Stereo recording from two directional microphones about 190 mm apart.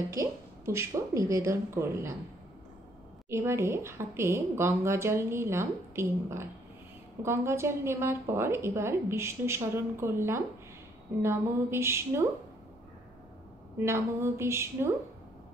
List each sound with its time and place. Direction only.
0.2 s a woman's voice: 15° right (ahead or behind)
3.3 s a woman's voice: 15° right (ahead or behind)
13.7 s a woman's voice: 15° right (ahead or behind)